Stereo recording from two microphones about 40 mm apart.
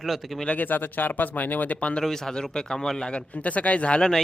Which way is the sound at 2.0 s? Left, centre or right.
Centre.